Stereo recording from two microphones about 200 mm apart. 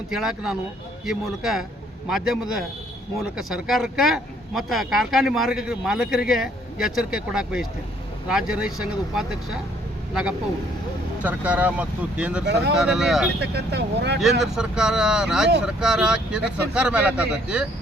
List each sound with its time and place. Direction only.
0.1 s speech: centre (ahead or behind)
11.2 s speech: 5° right (ahead or behind)
12.5 s speech: 55° right (ahead or behind)
12.7 s speech: 5° right (ahead or behind)
13.4 s speech: 55° right (ahead or behind)
14.2 s speech: centre (ahead or behind)